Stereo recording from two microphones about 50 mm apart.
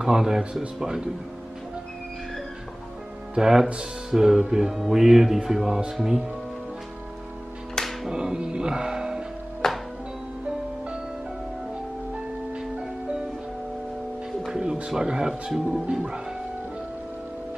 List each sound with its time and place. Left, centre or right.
0.0 s speech: centre
3.3 s speech: centre
7.7 s music: centre
8.1 s music: centre
9.6 s music: centre
12.5 s music: centre
14.5 s music: centre
14.9 s speech: centre